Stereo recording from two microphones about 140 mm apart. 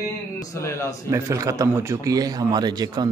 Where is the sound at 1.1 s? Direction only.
20° right (ahead or behind).